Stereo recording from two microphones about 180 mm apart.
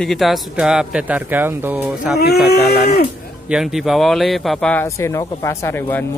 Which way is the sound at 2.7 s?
60° left (ahead or behind).